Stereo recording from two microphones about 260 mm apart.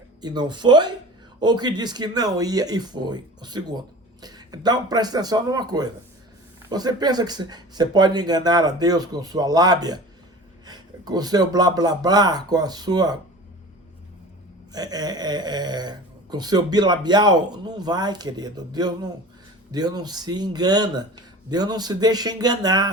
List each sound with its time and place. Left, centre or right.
0.2 s speech: centre
14.7 s speech: centre